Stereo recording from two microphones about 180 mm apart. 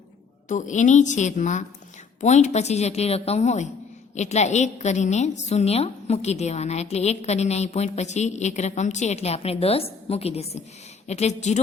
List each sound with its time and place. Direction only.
0.4 s a woman's voice: 45° left (ahead or behind)